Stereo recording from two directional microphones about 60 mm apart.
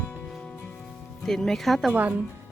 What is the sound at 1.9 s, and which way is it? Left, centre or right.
Speech, right.